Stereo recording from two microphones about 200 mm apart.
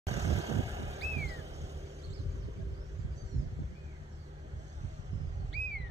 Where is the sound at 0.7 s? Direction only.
35° right (ahead or behind).